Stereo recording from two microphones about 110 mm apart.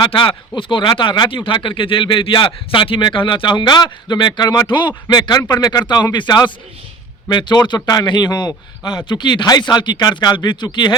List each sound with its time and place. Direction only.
0.0 s a man's voice: 50° left (ahead or behind)